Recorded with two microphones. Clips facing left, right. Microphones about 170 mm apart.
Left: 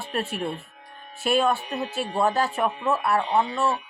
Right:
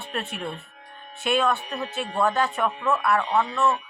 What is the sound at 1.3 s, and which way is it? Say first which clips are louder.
Speech: left 1 dB; 35° left (ahead or behind).